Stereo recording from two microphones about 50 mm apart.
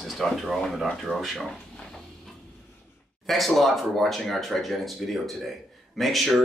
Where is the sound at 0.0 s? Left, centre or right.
Centre.